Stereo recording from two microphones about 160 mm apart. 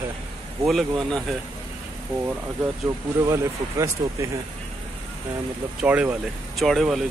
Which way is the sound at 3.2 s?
20° right (ahead or behind).